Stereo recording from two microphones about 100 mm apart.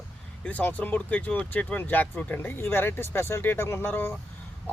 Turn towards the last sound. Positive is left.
turn(degrees=20)  # may be behind; listen again after turning